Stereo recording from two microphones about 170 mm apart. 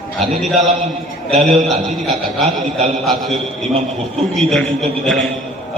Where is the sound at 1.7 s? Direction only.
Centre (ahead or behind).